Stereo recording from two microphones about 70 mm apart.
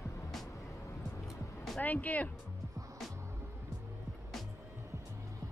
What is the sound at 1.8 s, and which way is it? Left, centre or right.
Speech, left.